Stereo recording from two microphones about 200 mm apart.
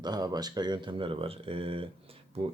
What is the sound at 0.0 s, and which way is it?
Speech, 20° right (ahead or behind).